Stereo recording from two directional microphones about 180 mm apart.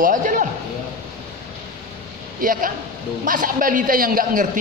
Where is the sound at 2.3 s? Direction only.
50° right (ahead or behind).